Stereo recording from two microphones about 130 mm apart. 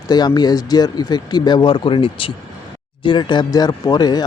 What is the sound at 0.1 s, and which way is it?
Speech, 35° left (ahead or behind).